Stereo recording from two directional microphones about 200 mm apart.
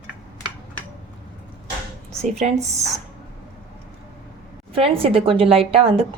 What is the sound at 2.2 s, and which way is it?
Speech, 35° right (ahead or behind).